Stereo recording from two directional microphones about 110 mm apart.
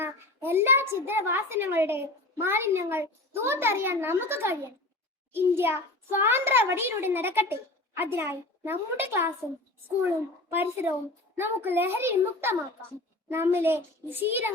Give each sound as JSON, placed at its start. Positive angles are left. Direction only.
{"t": 0.0, "sound": "a child's voice", "side_deg": -20}
{"t": 10.5, "sound": "a child's voice", "side_deg": -20}